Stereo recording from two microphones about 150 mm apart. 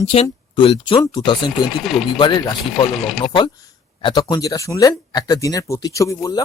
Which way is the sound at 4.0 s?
30° left (ahead or behind).